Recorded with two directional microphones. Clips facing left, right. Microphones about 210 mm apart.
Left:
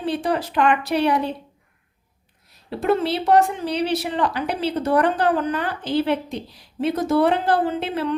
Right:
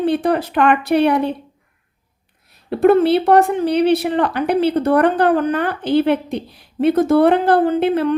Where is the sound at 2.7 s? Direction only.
55° right (ahead or behind).